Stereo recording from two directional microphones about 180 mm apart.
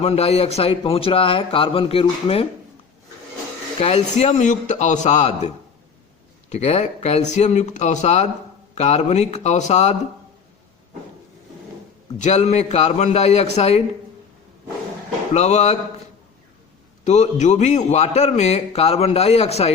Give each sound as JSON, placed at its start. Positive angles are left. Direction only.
{"t": 0.0, "sound": "a man's voice", "side_deg": 35}
{"t": 3.8, "sound": "a man's voice", "side_deg": 35}
{"t": 6.5, "sound": "a man's voice", "side_deg": 40}
{"t": 12.2, "sound": "a man's voice", "side_deg": 40}
{"t": 15.3, "sound": "a man's voice", "side_deg": 40}
{"t": 17.0, "sound": "a man's voice", "side_deg": 40}